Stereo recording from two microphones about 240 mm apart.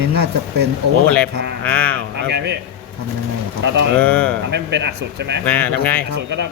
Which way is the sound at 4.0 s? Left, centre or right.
Centre.